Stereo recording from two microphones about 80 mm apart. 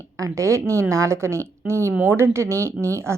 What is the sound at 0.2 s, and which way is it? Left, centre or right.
Speech, right.